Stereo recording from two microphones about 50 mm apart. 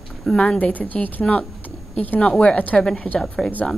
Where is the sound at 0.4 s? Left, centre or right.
Left.